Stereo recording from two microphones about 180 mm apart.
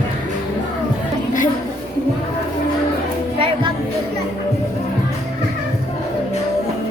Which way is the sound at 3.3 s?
30° right (ahead or behind).